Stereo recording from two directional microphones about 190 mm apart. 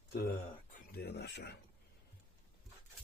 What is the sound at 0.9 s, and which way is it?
Speech, 60° left (ahead or behind).